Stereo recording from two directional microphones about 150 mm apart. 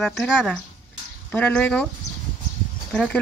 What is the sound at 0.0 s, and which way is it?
Speech, 5° left (ahead or behind).